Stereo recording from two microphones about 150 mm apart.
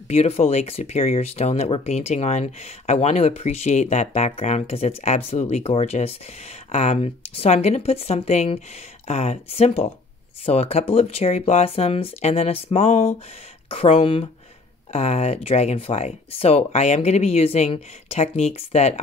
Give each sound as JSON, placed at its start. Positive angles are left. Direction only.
{"t": 0.1, "sound": "speech", "side_deg": 45}